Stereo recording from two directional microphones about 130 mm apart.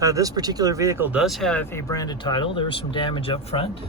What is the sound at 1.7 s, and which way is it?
Speech, 25° left (ahead or behind).